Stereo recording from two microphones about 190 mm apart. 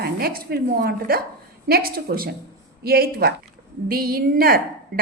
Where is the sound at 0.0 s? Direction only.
50° right (ahead or behind).